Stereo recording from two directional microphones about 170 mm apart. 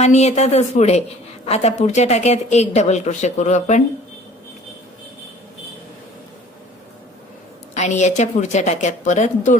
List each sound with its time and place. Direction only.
0.0 s a woman's voice: 40° left (ahead or behind)
7.7 s a woman's voice: 45° left (ahead or behind)